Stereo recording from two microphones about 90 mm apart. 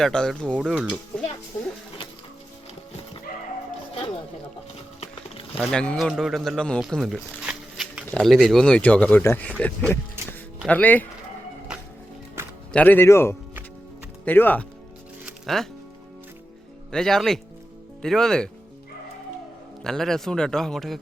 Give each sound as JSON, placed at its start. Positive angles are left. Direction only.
{"t": 0.0, "sound": "speech", "side_deg": 5}
{"t": 0.6, "sound": "speech", "side_deg": -5}
{"t": 5.5, "sound": "speech", "side_deg": 15}
{"t": 6.0, "sound": "speech", "side_deg": 0}
{"t": 7.0, "sound": "zipper", "side_deg": -5}
{"t": 8.1, "sound": "speech", "side_deg": 0}
{"t": 8.6, "sound": "speech", "side_deg": 15}
{"t": 11.7, "sound": "music", "side_deg": -10}
{"t": 12.4, "sound": "music", "side_deg": -30}
{"t": 12.7, "sound": "speech", "side_deg": 20}
{"t": 15.4, "sound": "speech", "side_deg": 5}
{"t": 16.9, "sound": "speech", "side_deg": 5}
{"t": 19.8, "sound": "speech", "side_deg": 5}